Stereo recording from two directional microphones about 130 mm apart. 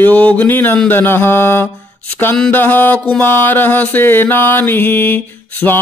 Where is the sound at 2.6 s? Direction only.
15° left (ahead or behind).